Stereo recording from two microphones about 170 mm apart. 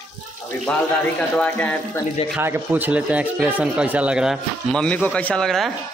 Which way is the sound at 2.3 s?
10° right (ahead or behind).